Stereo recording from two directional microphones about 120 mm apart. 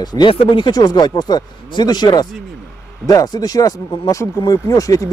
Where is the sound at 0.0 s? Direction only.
35° left (ahead or behind).